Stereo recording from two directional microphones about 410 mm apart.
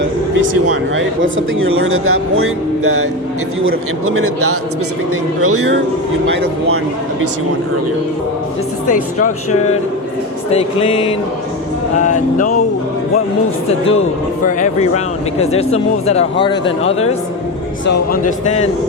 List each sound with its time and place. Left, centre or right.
0.3 s speech: right
8.9 s a man's voice: centre
13.7 s a man's voice: centre